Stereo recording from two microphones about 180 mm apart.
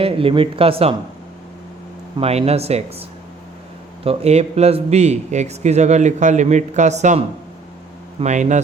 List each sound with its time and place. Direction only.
0.0 s a man's voice: 30° right (ahead or behind)
2.1 s a man's voice: 30° right (ahead or behind)
4.0 s a man's voice: 35° right (ahead or behind)